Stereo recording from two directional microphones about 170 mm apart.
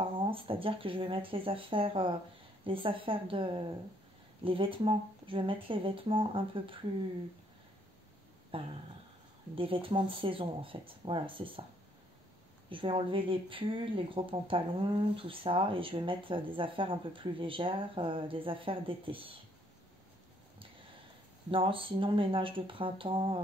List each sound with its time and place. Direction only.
0.0 s speech: 30° right (ahead or behind)
8.5 s a sound: 30° right (ahead or behind)
9.6 s speech: 30° right (ahead or behind)
12.6 s speech: 30° right (ahead or behind)
21.5 s speech: 30° right (ahead or behind)